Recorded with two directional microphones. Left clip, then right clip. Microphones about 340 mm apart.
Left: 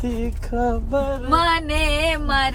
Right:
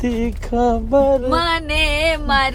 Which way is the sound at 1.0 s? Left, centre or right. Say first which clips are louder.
Right 10 dB; centre.